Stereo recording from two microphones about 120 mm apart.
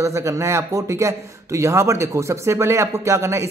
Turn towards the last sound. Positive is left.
turn(degrees=-25)  # may be behind; listen again after turning